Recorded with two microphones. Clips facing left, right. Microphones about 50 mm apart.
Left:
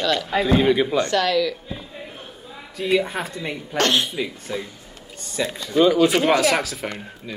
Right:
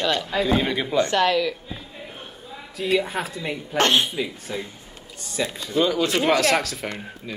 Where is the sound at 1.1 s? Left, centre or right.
Right.